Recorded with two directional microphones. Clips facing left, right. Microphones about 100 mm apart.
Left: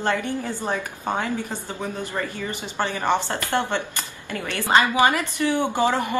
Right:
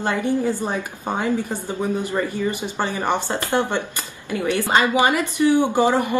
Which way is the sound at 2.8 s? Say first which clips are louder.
Left 2 dB; 15° right (ahead or behind).